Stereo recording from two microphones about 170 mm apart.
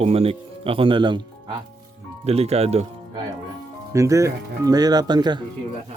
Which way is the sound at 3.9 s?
20° right (ahead or behind).